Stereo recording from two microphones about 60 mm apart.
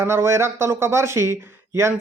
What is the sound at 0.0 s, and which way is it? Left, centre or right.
Speech, right.